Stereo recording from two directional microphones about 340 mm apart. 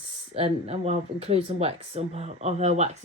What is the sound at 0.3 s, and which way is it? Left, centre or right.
Speech, centre.